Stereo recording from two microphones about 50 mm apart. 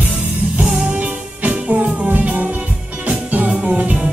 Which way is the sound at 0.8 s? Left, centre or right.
Right.